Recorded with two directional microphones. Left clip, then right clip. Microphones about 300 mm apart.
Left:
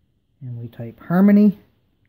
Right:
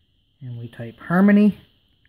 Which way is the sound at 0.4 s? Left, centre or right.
Centre.